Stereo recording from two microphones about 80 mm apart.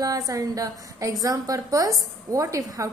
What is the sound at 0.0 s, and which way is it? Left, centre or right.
A woman's voice, right.